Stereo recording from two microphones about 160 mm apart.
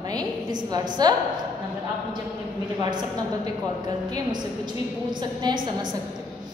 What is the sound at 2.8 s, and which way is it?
Speech, 25° right (ahead or behind).